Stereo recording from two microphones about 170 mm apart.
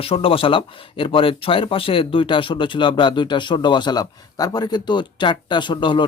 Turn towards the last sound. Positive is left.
turn(degrees=30)  # may be behind; listen again after turning